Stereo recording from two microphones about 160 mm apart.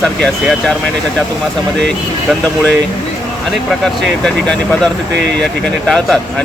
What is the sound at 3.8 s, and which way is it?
Speech, 5° left (ahead or behind).